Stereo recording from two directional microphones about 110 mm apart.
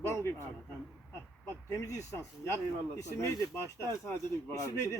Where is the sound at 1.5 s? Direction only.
25° left (ahead or behind).